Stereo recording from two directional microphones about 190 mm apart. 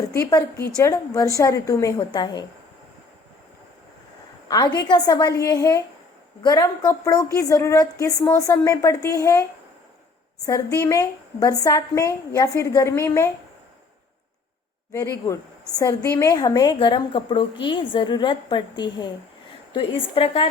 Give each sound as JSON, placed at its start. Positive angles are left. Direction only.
{"t": 0.1, "sound": "a woman's voice", "side_deg": 15}
{"t": 4.4, "sound": "a woman's voice", "side_deg": 20}
{"t": 14.9, "sound": "a woman's voice", "side_deg": 15}